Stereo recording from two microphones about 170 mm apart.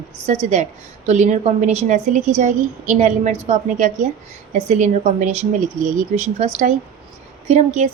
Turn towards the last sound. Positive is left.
turn(degrees=-40)  # may be behind; listen again after turning